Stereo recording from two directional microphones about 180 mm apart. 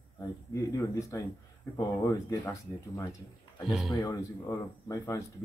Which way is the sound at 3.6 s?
Centre (ahead or behind).